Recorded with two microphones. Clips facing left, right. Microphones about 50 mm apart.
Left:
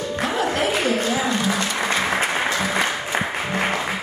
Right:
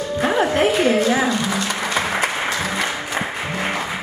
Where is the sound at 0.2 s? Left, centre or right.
Right.